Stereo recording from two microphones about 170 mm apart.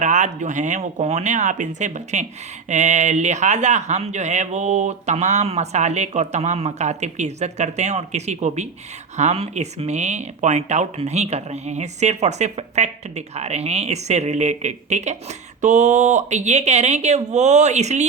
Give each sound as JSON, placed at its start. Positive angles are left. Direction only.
{"t": 0.0, "sound": "speech", "side_deg": -45}